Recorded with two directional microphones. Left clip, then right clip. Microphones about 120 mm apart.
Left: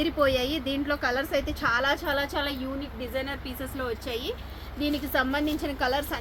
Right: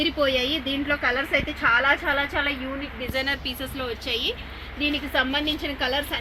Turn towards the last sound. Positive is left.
turn(degrees=-20)  # may be behind; listen again after turning